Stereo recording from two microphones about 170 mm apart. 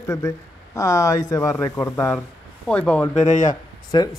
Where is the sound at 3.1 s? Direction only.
45° left (ahead or behind).